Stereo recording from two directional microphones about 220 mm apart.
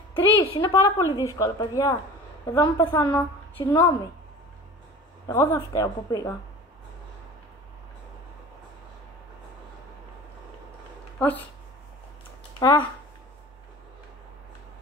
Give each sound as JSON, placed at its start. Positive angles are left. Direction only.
{"t": 0.4, "sound": "a woman's voice", "side_deg": 15}
{"t": 5.2, "sound": "a woman's voice", "side_deg": 15}
{"t": 11.1, "sound": "speech", "side_deg": 10}
{"t": 12.5, "sound": "speech", "side_deg": 15}